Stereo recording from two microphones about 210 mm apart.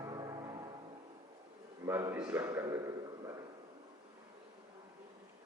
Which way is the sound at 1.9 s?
10° right (ahead or behind).